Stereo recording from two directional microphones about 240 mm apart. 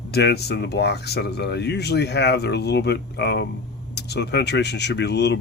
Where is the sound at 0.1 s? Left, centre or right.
Left.